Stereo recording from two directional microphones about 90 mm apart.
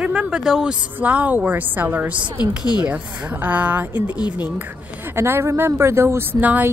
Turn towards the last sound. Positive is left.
turn(degrees=-20)  # may be behind; listen again after turning